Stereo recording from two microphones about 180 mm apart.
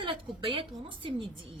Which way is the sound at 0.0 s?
30° right (ahead or behind).